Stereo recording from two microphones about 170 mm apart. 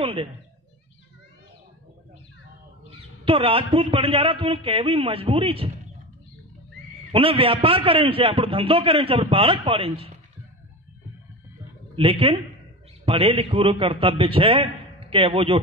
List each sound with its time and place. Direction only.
0.0 s speech: 35° right (ahead or behind)
3.3 s a man's voice: 35° right (ahead or behind)
7.1 s a man's voice: 30° right (ahead or behind)
11.9 s a man's voice: 35° right (ahead or behind)